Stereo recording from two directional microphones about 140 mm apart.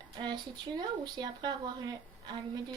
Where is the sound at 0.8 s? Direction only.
30° right (ahead or behind).